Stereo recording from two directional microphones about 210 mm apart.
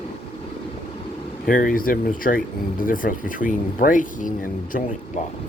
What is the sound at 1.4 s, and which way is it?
Speech, 40° left (ahead or behind).